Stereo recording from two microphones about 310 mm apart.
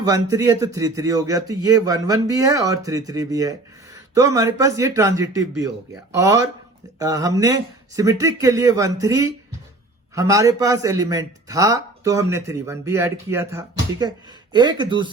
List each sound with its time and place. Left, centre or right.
0.0 s a man's voice: centre